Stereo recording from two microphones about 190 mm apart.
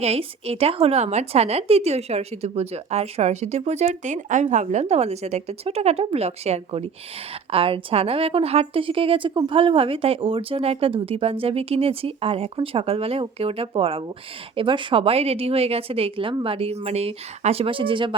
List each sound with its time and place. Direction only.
0.0 s a woman's voice: 30° right (ahead or behind)